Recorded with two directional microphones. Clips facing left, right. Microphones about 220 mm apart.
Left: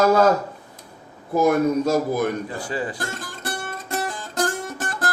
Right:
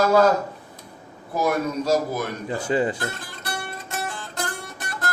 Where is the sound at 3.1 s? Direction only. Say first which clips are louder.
Left 2 dB; 45° left (ahead or behind).